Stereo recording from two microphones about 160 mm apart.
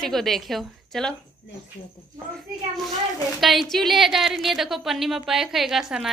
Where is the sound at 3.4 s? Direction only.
Centre (ahead or behind).